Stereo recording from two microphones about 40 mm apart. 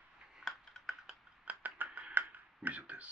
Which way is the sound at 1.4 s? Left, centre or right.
Right.